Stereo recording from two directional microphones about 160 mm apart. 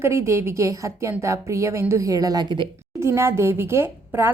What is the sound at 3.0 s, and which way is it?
Speech, 15° right (ahead or behind).